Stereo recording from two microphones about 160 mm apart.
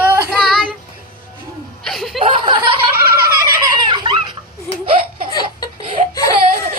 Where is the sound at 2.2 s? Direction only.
30° right (ahead or behind).